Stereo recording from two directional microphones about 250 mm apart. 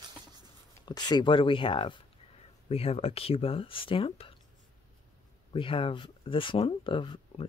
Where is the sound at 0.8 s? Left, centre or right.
Centre.